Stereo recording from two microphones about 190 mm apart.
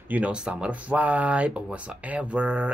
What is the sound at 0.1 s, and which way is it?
Speech, 5° right (ahead or behind).